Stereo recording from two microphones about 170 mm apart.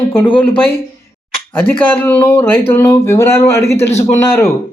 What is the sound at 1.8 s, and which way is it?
Speech, 10° left (ahead or behind).